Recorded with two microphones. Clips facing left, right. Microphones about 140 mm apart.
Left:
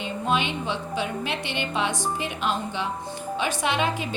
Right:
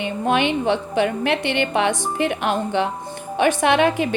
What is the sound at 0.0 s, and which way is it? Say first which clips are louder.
A woman's voice: right 6 dB; 60° right (ahead or behind).